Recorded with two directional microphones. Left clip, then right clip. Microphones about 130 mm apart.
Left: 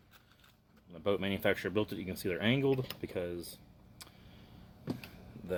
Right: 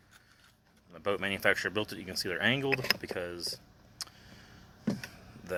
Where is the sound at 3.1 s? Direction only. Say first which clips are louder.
Right 1 dB; 80° left.